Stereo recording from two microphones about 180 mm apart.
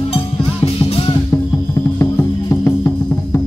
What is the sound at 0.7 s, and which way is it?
Music, 30° left (ahead or behind).